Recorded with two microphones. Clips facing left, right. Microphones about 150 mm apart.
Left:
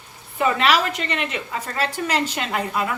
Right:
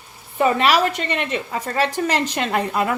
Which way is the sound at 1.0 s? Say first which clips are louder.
Right 3 dB; 40° right (ahead or behind).